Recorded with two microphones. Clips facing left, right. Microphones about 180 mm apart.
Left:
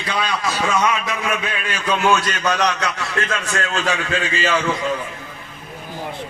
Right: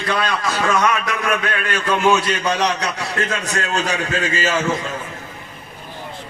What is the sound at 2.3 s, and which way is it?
A man's voice, 30° right (ahead or behind).